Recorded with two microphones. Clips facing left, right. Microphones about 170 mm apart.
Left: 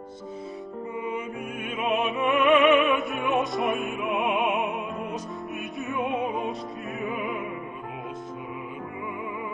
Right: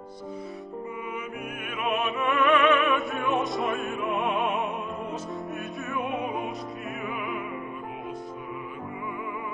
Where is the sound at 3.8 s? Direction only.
20° left (ahead or behind).